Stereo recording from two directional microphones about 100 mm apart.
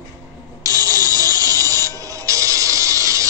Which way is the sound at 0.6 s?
35° right (ahead or behind).